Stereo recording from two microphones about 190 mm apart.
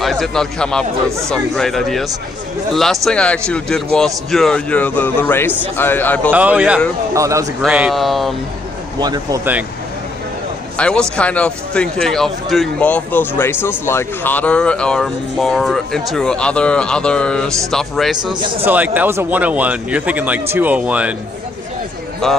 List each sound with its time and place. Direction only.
0.0 s speech: centre (ahead or behind)
1.0 s speech: 15° right (ahead or behind)
1.3 s speech: centre (ahead or behind)
6.3 s speech: 10° right (ahead or behind)
7.1 s speech: 15° right (ahead or behind)
7.6 s speech: 5° right (ahead or behind)
9.0 s speech: 20° right (ahead or behind)
9.4 s speech: 10° right (ahead or behind)
10.8 s speech: 5° left (ahead or behind)
22.2 s speech: centre (ahead or behind)